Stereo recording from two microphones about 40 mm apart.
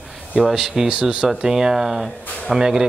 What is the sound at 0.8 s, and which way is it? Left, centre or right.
Speech, right.